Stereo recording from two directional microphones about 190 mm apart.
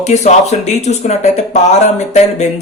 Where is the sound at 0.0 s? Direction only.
35° left (ahead or behind).